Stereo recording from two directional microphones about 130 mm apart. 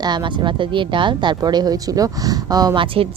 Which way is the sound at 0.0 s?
35° right (ahead or behind).